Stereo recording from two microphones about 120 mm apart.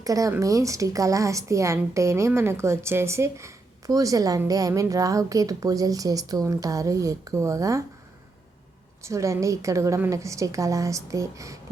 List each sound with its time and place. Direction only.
0.0 s speech: 30° right (ahead or behind)
9.0 s speech: 25° right (ahead or behind)